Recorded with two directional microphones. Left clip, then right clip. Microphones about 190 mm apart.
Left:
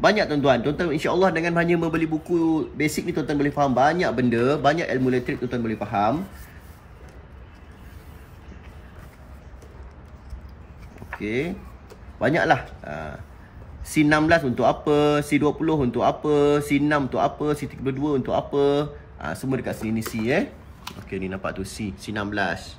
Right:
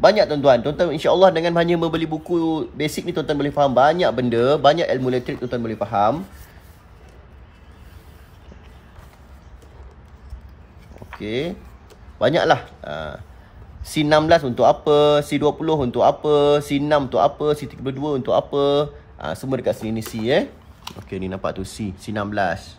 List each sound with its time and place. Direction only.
0.0 s a man's voice: 60° right (ahead or behind)
11.1 s a man's voice: 60° right (ahead or behind)